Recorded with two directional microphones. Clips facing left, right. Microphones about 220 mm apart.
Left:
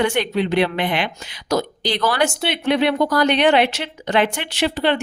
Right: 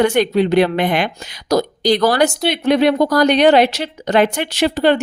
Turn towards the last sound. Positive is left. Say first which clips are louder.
# right 5 dB
turn(degrees=-40)  # may be behind; listen again after turning